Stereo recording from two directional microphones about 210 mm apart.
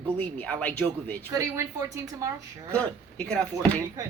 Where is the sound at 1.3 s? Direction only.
10° right (ahead or behind).